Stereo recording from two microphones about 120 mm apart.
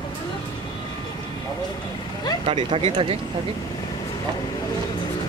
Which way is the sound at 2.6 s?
45° right (ahead or behind).